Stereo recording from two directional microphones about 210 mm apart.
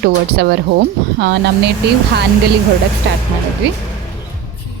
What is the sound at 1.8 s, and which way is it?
Speech, 55° right (ahead or behind).